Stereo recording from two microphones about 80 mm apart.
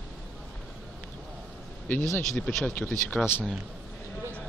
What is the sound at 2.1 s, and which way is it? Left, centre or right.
Speech, centre.